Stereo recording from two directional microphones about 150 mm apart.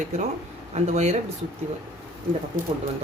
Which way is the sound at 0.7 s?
50° right (ahead or behind).